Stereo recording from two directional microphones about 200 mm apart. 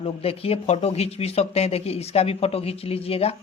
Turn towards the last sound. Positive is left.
turn(degrees=30)  # may be behind; listen again after turning